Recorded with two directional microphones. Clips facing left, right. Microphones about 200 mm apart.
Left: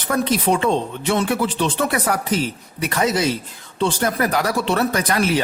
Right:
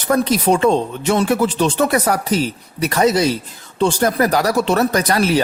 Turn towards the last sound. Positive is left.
turn(degrees=-40)  # may be behind; listen again after turning